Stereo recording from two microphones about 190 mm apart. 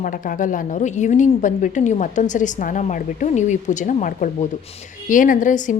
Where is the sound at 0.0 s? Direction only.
45° left (ahead or behind).